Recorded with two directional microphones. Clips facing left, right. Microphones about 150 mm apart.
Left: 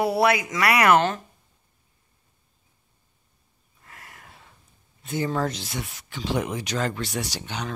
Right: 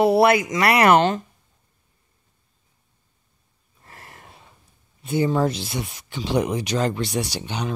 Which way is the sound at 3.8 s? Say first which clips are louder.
Right 3 dB; 35° right (ahead or behind).